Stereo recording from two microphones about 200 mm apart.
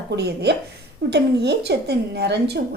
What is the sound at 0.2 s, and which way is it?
A woman's voice, 55° right (ahead or behind).